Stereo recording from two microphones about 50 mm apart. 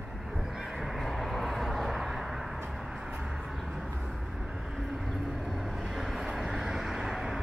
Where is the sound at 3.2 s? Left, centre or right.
Centre.